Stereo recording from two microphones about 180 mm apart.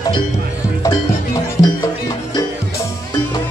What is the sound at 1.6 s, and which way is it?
Music, 20° left (ahead or behind).